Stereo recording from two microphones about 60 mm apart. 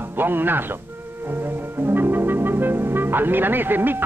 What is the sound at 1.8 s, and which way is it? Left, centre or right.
Speech, right.